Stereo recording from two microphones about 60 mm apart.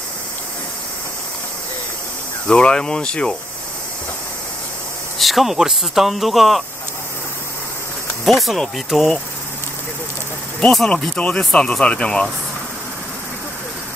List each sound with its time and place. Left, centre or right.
2.4 s speech: centre
5.2 s speech: centre
8.3 s speech: centre
10.9 s speech: centre